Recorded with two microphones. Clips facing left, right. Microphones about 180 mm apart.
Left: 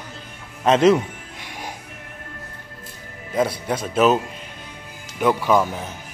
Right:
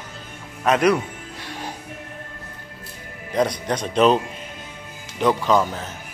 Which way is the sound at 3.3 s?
5° left (ahead or behind).